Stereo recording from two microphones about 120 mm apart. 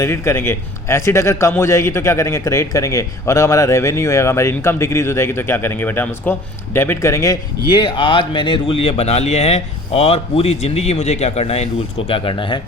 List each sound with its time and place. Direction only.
0.0 s a man's voice: 20° left (ahead or behind)
7.7 s speech: 40° left (ahead or behind)